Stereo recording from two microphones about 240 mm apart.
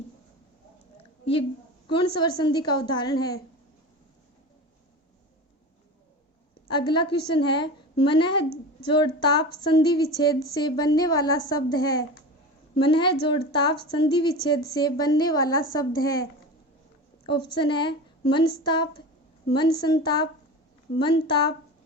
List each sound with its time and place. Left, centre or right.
1.2 s a woman's voice: left
6.7 s a woman's voice: centre
17.2 s a woman's voice: centre